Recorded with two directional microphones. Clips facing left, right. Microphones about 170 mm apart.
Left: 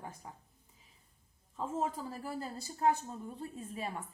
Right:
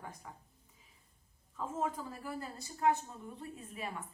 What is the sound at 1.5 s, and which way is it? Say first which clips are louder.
A woman's voice: left 1 dB; 30° left (ahead or behind).